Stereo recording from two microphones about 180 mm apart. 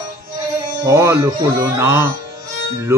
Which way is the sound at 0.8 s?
15° right (ahead or behind).